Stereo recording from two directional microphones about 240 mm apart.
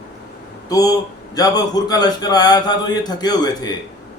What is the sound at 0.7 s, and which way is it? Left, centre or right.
A man's voice, centre.